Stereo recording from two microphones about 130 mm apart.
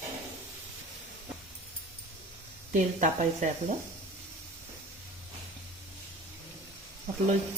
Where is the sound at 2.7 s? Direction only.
70° right (ahead or behind).